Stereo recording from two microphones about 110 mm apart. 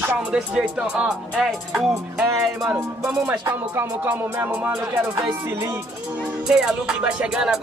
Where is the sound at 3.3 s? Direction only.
20° right (ahead or behind).